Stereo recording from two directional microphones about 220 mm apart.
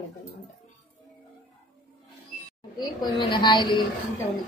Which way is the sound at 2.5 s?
20° left (ahead or behind).